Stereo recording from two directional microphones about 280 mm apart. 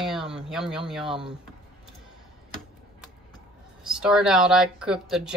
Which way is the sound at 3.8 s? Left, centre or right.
Centre.